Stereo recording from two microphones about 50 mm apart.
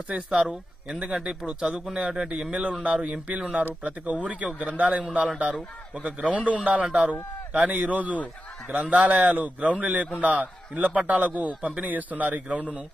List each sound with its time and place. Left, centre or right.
0.3 s a man's voice: centre; by 12.6 s right